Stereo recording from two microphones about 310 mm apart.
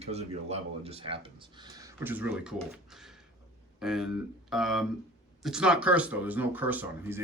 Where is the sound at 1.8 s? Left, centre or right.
Centre.